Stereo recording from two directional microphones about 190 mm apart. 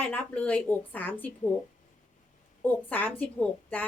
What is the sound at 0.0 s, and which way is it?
A woman's voice, 10° left (ahead or behind).